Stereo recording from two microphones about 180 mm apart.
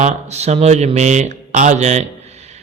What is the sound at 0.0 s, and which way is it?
A man's voice, 35° right (ahead or behind).